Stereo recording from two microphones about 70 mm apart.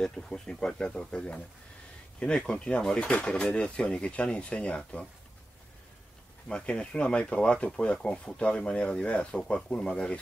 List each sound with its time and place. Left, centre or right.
0.0 s speech: centre
6.5 s speech: centre